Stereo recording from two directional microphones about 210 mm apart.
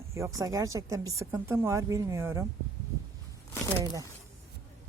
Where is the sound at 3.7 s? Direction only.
20° right (ahead or behind).